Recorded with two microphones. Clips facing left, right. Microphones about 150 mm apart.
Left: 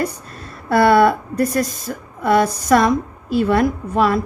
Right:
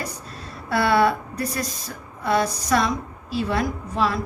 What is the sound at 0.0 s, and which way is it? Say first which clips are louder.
A woman's voice: left 9 dB; 50° left (ahead or behind).